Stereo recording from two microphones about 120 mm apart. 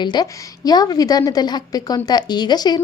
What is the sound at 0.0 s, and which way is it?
A woman's voice, 35° left (ahead or behind).